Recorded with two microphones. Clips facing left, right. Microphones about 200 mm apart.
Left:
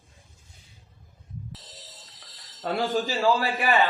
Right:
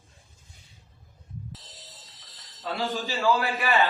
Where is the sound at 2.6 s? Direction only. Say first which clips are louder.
Left 5 dB; 55° left (ahead or behind).